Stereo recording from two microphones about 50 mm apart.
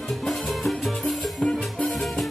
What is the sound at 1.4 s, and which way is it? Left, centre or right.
Music, left.